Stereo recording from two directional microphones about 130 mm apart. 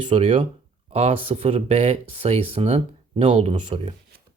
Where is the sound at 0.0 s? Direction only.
40° right (ahead or behind).